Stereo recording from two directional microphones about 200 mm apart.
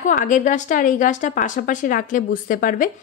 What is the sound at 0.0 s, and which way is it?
A woman's voice, 40° left (ahead or behind).